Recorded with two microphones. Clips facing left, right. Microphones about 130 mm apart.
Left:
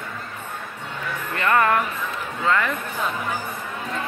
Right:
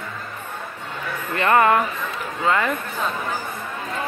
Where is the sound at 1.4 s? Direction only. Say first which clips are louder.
Right 3 dB; 20° right (ahead or behind).